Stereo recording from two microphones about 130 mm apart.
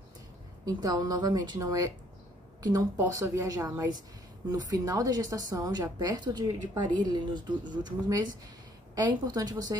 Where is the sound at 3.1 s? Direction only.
25° right (ahead or behind).